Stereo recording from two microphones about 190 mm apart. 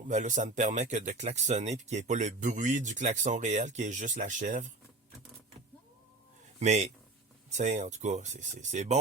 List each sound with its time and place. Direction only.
0.1 s speech: 40° right (ahead or behind)
6.6 s speech: 35° right (ahead or behind)